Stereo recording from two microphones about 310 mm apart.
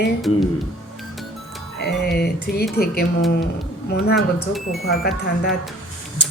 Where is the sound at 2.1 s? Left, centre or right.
Left.